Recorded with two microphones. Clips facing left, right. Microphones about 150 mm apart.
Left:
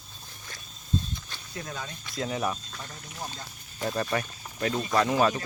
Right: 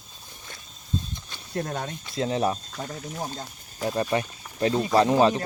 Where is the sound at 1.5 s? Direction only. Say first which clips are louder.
Right 8 dB; 60° right (ahead or behind).